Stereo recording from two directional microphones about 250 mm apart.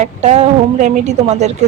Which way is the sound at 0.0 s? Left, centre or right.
Right.